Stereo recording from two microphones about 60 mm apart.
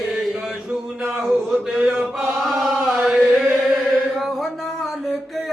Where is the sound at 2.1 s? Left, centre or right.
Centre.